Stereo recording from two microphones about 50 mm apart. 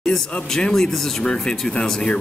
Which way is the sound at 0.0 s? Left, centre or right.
Centre.